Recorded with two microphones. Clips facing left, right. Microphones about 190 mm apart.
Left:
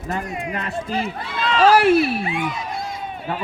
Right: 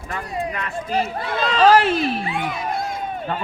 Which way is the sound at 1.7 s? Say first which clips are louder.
Left 2 dB; 10° left (ahead or behind).